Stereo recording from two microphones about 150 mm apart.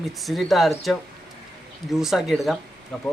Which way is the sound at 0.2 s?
Centre (ahead or behind).